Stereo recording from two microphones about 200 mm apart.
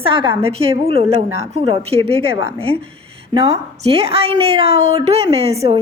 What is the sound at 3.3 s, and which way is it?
A woman's voice, 30° right (ahead or behind).